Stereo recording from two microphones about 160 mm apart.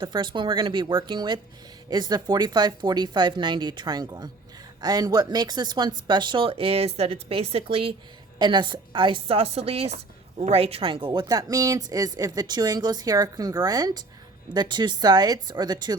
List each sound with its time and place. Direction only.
0.0 s a woman's voice: 30° right (ahead or behind)